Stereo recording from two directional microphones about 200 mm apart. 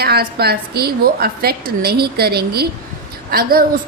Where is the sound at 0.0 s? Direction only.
50° right (ahead or behind).